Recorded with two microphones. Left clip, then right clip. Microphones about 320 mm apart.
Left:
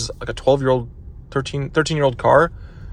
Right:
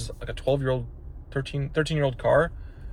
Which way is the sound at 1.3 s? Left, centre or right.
Left.